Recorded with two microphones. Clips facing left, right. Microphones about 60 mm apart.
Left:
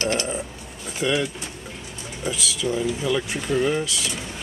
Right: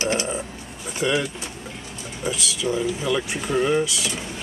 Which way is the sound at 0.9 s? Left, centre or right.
Centre.